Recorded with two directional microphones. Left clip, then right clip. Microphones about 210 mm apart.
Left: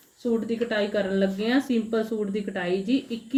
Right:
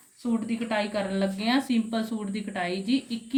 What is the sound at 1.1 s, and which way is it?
A woman's voice, 40° right (ahead or behind).